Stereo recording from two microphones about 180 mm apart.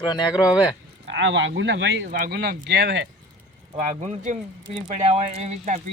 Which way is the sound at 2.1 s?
55° right (ahead or behind).